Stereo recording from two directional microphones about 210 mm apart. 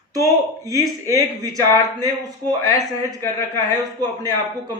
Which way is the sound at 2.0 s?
15° right (ahead or behind).